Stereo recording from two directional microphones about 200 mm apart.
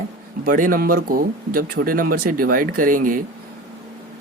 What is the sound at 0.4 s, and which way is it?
Speech, 45° right (ahead or behind).